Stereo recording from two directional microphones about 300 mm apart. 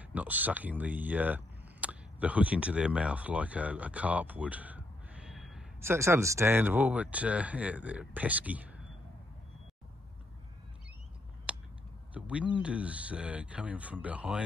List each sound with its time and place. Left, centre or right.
0.0 s speech: centre
11.5 s a sound: centre
12.1 s speech: centre